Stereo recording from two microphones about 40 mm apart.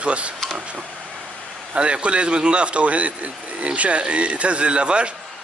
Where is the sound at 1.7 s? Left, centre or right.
Right.